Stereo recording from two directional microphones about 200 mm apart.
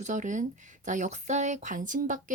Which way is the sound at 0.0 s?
40° right (ahead or behind).